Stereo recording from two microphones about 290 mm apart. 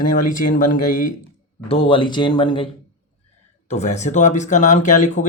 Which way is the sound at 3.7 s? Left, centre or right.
Left.